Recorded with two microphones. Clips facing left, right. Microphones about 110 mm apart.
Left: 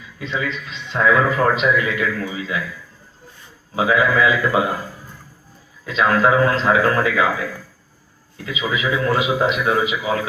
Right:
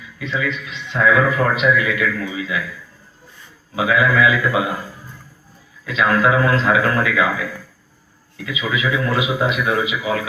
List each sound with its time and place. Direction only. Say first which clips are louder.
0.2 s a man's voice: right 1 dB; 30° left (ahead or behind)
3.8 s a man's voice: even; 30° left (ahead or behind)
5.8 s a man's voice: even; 30° left (ahead or behind)
8.5 s a man's voice: even; 30° left (ahead or behind)